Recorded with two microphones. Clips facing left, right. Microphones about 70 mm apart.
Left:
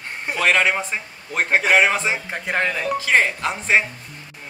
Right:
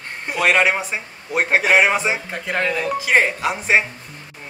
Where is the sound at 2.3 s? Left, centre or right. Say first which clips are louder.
Right 1 dB; centre.